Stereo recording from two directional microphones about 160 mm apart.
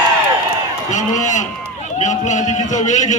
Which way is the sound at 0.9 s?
50° left (ahead or behind).